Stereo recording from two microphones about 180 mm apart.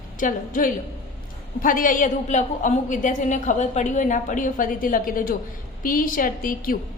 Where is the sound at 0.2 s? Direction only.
45° left (ahead or behind).